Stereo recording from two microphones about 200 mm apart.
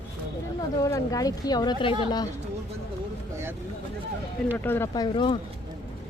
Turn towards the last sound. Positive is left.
turn(degrees=25)  # may be behind; listen again after turning